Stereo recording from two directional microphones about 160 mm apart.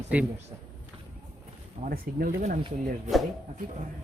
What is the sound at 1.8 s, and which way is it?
Speech, 50° right (ahead or behind).